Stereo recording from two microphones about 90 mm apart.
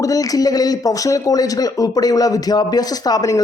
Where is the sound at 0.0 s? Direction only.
40° left (ahead or behind).